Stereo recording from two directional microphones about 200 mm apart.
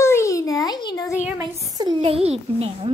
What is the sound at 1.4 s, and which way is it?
Speech, 20° right (ahead or behind).